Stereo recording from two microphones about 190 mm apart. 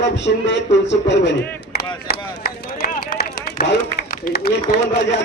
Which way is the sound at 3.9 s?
50° left (ahead or behind).